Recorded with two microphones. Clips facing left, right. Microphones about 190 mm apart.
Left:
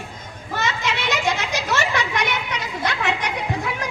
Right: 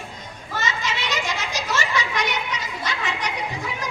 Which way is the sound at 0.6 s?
60° left (ahead or behind).